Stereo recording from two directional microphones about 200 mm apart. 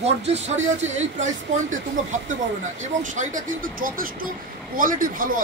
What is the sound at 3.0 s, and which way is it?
Speech, 40° right (ahead or behind).